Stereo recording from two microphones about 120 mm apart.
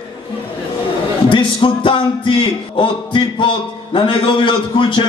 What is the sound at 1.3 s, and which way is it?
A man's voice, 45° left (ahead or behind).